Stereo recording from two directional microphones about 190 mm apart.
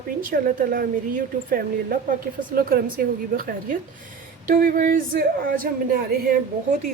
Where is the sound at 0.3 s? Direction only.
50° right (ahead or behind).